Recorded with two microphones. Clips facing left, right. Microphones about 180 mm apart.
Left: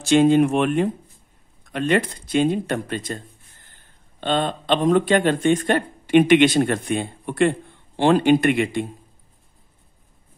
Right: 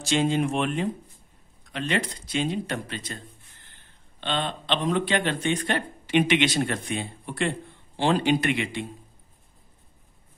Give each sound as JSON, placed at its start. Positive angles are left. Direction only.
{"t": 0.0, "sound": "speech", "side_deg": 55}